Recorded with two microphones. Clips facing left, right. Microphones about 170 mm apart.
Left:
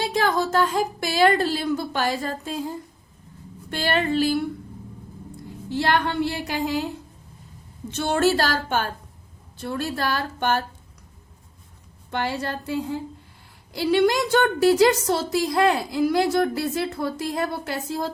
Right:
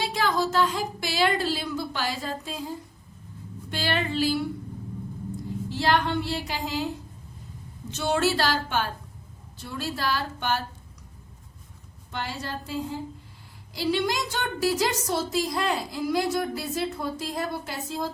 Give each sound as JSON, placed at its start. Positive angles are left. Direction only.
{"t": 0.1, "sound": "a woman's voice", "side_deg": 50}
{"t": 3.7, "sound": "a woman's voice", "side_deg": 50}
{"t": 5.8, "sound": "a woman's voice", "side_deg": 60}
{"t": 7.9, "sound": "a woman's voice", "side_deg": 55}
{"t": 12.1, "sound": "a woman's voice", "side_deg": 60}